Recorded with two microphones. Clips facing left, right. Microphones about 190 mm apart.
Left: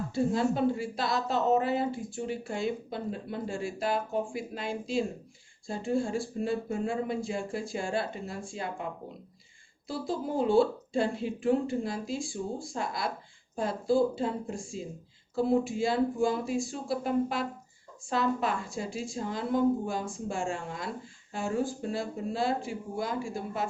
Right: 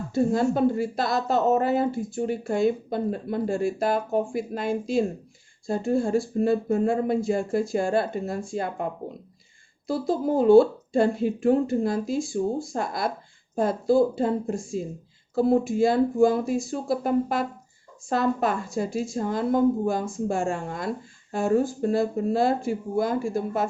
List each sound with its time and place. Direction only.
0.1 s speech: 50° right (ahead or behind)